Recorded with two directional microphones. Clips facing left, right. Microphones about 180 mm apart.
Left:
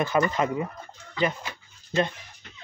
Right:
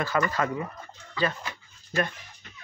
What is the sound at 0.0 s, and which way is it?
Speech, 20° left (ahead or behind).